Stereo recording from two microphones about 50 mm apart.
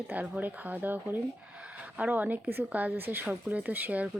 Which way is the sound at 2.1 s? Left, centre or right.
Right.